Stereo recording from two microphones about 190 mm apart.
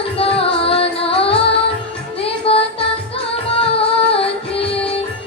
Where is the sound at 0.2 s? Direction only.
30° left (ahead or behind).